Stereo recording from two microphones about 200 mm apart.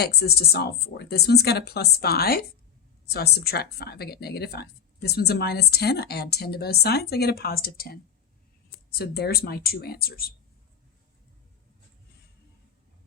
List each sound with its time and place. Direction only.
0.0 s speech: 55° left (ahead or behind)